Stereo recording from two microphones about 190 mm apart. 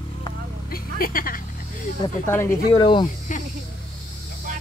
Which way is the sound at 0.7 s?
50° left (ahead or behind).